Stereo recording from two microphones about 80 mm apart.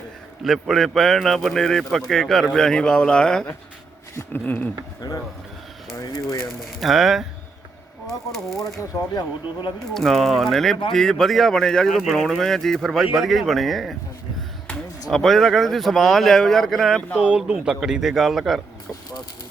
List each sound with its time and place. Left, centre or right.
0.4 s a man's voice: centre
4.1 s speech: left
4.4 s speech: left
6.6 s a man's voice: centre
8.3 s a man's voice: centre
9.1 s speech: left
9.9 s a man's voice: centre
15.1 s a man's voice: centre
17.2 s a man's voice: centre